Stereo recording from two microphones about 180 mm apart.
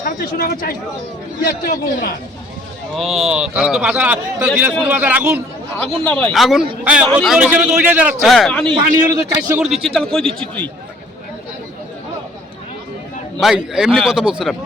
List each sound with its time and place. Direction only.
0.0 s a man's voice: 60° left (ahead or behind)
2.9 s a man's voice: centre (ahead or behind)
5.7 s a man's voice: 10° left (ahead or behind)
8.6 s a man's voice: 25° right (ahead or behind)
9.5 s speech: 5° right (ahead or behind)
13.4 s speech: 5° right (ahead or behind)